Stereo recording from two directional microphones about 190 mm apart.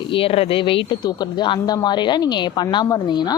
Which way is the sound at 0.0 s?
30° left (ahead or behind).